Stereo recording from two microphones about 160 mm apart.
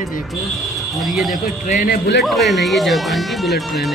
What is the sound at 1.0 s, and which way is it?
Speech, centre (ahead or behind).